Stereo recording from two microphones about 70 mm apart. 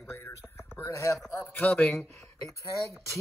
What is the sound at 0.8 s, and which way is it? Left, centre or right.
Speech, left.